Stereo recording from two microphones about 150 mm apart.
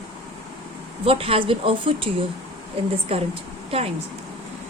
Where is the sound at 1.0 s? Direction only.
40° right (ahead or behind).